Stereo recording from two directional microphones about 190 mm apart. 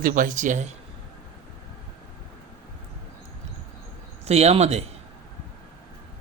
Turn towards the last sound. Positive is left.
turn(degrees=-35)  # may be behind; listen again after turning